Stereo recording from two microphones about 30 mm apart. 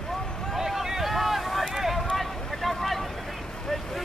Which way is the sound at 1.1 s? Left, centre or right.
Centre.